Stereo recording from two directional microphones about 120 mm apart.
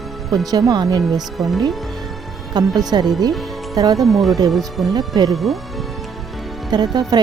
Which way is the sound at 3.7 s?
35° right (ahead or behind).